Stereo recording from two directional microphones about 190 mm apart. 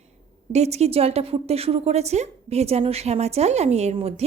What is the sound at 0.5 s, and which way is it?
A woman's voice, 35° right (ahead or behind).